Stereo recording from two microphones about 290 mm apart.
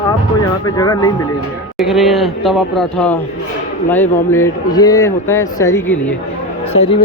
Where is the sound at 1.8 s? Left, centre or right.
Centre.